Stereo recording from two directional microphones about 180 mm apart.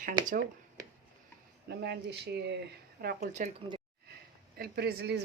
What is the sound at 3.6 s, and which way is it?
Speech, 30° right (ahead or behind).